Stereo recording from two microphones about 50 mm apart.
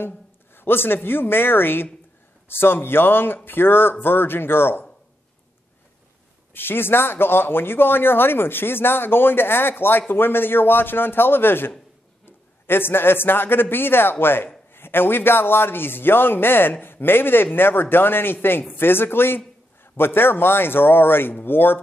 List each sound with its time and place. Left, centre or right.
0.6 s speech: left
6.5 s a man's voice: left